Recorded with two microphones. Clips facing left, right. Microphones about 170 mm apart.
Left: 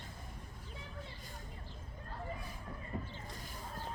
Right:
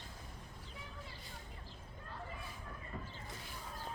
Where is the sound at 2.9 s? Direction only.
20° left (ahead or behind).